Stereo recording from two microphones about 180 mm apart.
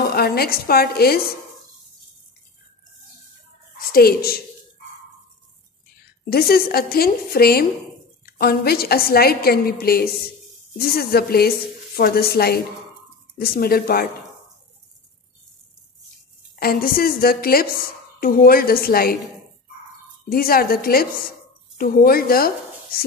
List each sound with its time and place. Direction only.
0.0 s a woman's voice: 60° left (ahead or behind)
3.9 s a woman's voice: 55° left (ahead or behind)
6.2 s a woman's voice: 60° left (ahead or behind)
16.5 s a woman's voice: 55° left (ahead or behind)
20.2 s a woman's voice: 55° left (ahead or behind)